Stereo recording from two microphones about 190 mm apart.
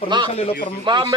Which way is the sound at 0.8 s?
25° right (ahead or behind).